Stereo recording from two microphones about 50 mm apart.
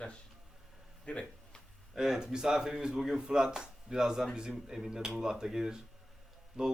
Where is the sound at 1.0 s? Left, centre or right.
Centre.